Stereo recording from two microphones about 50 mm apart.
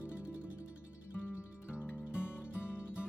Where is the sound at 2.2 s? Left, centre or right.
Left.